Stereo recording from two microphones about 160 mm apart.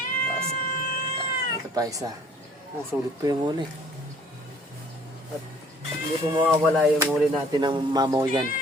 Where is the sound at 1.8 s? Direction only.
20° right (ahead or behind).